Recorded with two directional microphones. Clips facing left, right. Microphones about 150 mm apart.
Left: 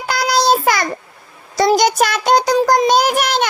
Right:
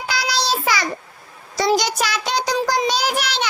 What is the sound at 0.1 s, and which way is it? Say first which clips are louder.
Child singing: left 8 dB; 50° left (ahead or behind).